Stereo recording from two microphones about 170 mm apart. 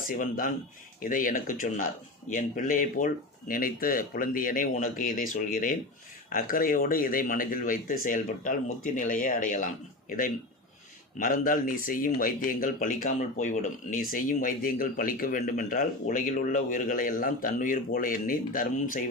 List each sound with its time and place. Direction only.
0.0 s speech: 55° left (ahead or behind)